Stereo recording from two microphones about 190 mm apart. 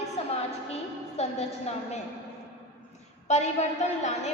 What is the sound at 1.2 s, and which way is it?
Speech, 35° left (ahead or behind).